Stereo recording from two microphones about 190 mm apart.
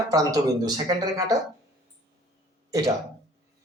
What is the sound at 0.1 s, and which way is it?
Speech, 20° right (ahead or behind).